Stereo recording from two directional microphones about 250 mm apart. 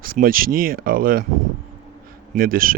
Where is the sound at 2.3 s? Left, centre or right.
Right.